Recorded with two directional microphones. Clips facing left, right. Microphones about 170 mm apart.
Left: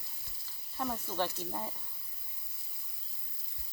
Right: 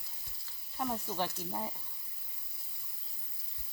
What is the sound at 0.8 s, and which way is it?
Speech, 10° right (ahead or behind).